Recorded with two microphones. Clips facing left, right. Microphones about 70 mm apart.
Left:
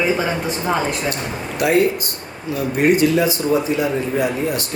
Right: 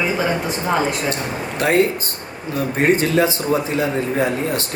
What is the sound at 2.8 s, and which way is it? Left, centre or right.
Speech, right.